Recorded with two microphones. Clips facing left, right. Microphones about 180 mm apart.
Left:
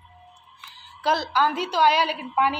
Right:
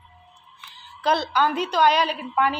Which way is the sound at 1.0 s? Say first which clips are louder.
Right 1 dB; 5° left (ahead or behind).